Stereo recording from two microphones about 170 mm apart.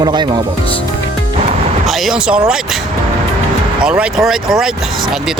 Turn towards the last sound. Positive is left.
turn(degrees=0)  # may be behind; listen again after turning